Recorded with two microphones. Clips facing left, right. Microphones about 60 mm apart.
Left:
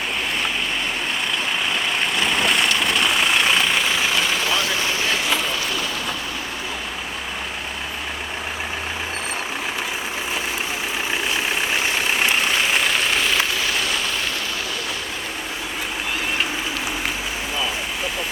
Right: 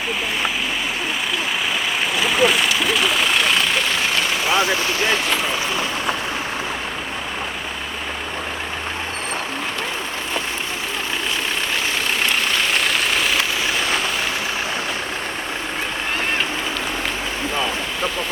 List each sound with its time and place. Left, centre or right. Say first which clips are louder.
2.1 s vehicle: right 4 dB; centre
4.4 s vehicle: right 4 dB; right
4.9 s speech: right 3 dB; right
12.2 s vehicle: even; centre